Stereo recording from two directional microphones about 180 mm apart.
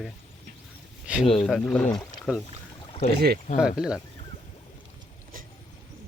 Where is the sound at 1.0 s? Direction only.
5° right (ahead or behind).